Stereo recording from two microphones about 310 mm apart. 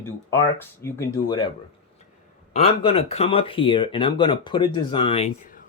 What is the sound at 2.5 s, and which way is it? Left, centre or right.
Speech, centre.